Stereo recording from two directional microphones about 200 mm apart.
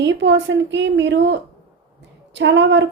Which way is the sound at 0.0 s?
65° right (ahead or behind).